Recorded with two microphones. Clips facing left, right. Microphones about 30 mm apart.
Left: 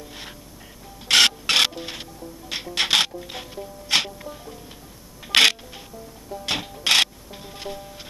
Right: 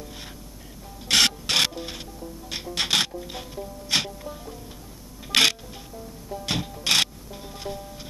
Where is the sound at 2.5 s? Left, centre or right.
Left.